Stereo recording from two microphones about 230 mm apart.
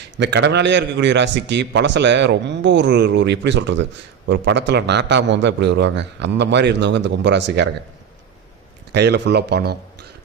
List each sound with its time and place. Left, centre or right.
0.2 s a man's voice: right
8.9 s a man's voice: right